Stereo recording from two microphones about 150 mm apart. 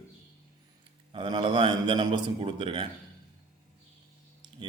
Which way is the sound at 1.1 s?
35° right (ahead or behind).